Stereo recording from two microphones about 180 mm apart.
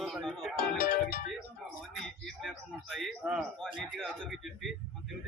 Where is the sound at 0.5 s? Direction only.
55° left (ahead or behind).